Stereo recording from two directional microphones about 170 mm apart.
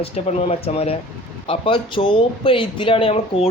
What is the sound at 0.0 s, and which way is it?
Speech, 35° left (ahead or behind).